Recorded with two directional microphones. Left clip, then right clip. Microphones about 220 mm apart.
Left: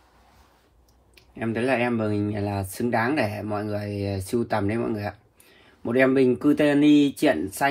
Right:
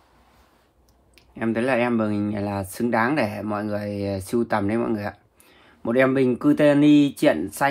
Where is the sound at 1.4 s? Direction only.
15° right (ahead or behind).